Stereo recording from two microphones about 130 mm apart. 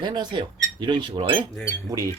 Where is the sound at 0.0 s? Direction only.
35° right (ahead or behind).